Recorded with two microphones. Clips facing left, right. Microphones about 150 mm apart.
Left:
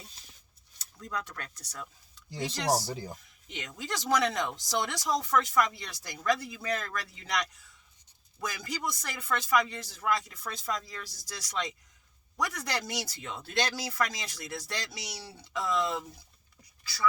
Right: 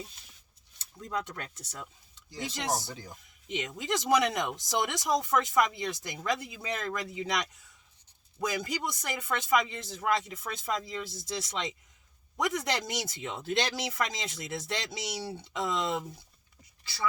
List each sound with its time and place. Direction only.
0.8 s speech: 25° right (ahead or behind)
2.3 s speech: 35° left (ahead or behind)
3.5 s speech: 20° right (ahead or behind)